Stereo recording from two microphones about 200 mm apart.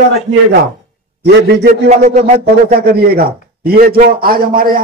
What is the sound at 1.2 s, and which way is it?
Speech, 60° right (ahead or behind).